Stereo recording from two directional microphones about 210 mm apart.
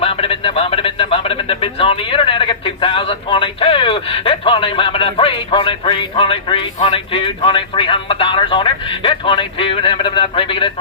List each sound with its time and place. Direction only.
0.0 s a man's voice: 25° left (ahead or behind)